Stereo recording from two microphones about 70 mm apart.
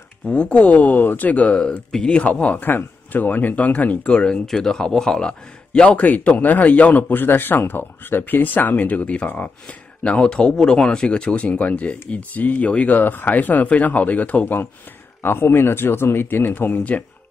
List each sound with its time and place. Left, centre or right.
0.3 s a man's voice: centre